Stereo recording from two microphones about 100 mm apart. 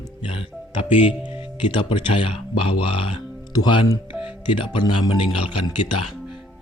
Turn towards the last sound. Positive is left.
turn(degrees=60)  # may be behind; listen again after turning